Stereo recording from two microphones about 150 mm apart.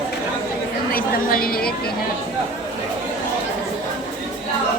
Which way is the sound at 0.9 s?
80° left.